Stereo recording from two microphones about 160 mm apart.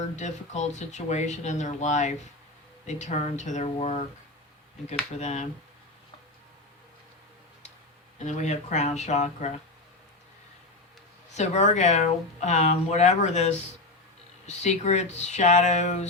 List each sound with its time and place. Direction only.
0.2 s speech: 45° left (ahead or behind)
5.1 s speech: 45° left (ahead or behind)
8.2 s speech: 45° left (ahead or behind)
11.3 s speech: 45° left (ahead or behind)